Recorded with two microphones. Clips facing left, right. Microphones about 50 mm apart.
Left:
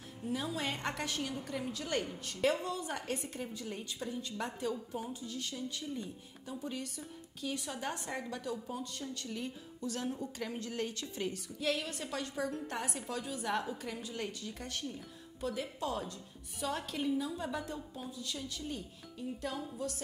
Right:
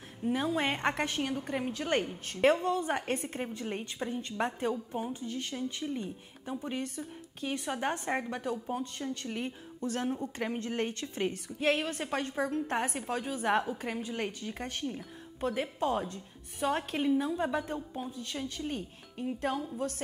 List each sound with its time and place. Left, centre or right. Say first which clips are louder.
0.2 s speech: right 7 dB; right